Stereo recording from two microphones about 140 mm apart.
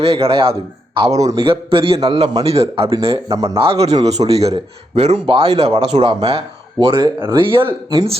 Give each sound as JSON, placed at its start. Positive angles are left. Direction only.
{"t": 0.0, "sound": "a man's voice", "side_deg": -45}
{"t": 1.4, "sound": "speech", "side_deg": -40}
{"t": 2.8, "sound": "a man's voice", "side_deg": -20}
{"t": 3.5, "sound": "speech", "side_deg": -40}